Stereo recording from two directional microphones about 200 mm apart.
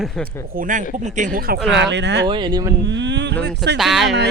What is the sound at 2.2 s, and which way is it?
Speech, 25° right (ahead or behind).